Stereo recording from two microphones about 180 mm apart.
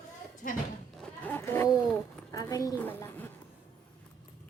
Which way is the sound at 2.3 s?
20° left (ahead or behind).